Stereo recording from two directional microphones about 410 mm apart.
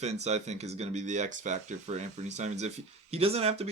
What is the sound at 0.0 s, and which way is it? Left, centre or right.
Speech, centre.